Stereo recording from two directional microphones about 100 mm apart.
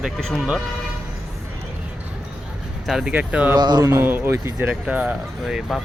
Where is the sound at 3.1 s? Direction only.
15° right (ahead or behind).